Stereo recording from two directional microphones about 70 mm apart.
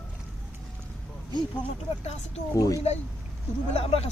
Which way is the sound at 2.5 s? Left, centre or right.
Left.